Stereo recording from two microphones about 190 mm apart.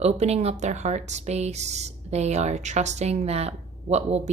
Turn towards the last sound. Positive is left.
turn(degrees=-35)  # may be behind; listen again after turning